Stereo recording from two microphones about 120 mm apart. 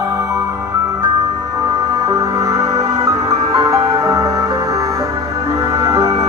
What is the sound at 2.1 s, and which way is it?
Music, 30° right (ahead or behind).